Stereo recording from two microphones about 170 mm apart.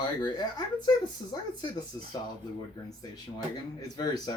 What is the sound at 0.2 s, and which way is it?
Speech, 25° left (ahead or behind).